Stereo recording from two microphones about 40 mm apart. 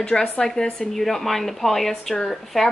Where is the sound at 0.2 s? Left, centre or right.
Centre.